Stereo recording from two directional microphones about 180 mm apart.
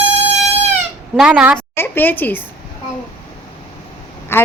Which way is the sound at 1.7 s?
10° left (ahead or behind).